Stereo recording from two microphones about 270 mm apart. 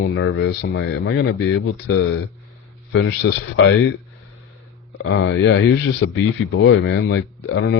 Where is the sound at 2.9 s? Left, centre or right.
Left.